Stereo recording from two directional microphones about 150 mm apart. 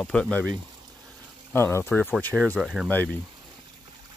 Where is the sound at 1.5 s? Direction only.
15° left (ahead or behind).